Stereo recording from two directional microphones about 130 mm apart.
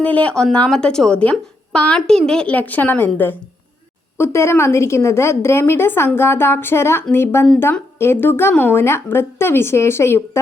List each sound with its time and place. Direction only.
0.0 s a woman's voice: 10° left (ahead or behind)